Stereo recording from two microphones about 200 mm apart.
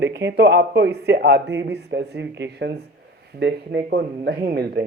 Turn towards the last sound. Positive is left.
turn(degrees=-50)  # may be behind; listen again after turning